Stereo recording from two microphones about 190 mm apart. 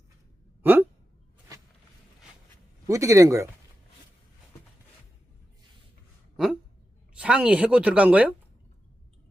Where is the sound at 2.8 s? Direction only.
15° right (ahead or behind).